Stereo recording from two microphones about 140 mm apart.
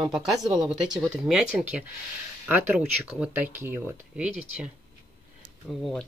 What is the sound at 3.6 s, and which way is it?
Speech, 5° right (ahead or behind).